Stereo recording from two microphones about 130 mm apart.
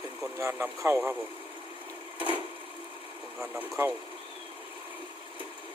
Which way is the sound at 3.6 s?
15° right (ahead or behind).